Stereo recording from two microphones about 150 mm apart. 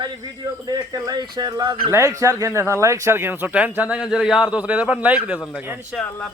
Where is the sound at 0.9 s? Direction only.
25° right (ahead or behind); by 5.4 s 10° right (ahead or behind).